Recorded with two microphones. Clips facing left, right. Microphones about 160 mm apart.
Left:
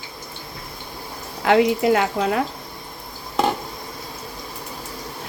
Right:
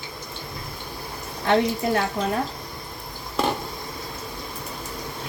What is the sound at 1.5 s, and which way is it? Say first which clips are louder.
Speech: left 5 dB; 90° left.